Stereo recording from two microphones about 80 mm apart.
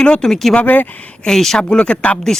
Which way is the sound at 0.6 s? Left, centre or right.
Centre.